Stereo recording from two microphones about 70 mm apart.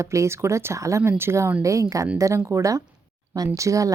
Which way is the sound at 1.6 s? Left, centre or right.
Right.